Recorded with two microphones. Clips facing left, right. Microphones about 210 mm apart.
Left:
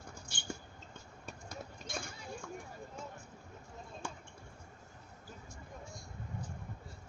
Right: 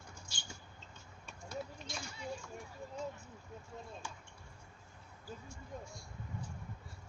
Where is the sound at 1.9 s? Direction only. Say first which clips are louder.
Even; 50° left (ahead or behind).